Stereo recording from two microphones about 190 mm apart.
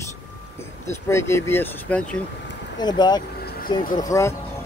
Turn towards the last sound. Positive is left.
turn(degrees=15)  # may be behind; listen again after turning